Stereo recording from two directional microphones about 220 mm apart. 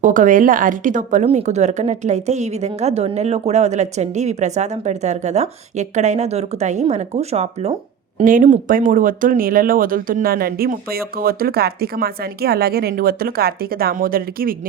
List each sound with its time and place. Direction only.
0.0 s a woman's voice: 35° right (ahead or behind)